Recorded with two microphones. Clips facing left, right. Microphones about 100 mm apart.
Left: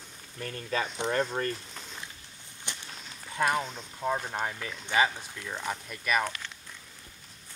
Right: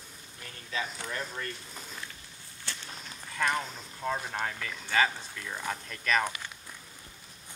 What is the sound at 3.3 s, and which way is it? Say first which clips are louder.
Speech: left 3 dB; 20° left (ahead or behind).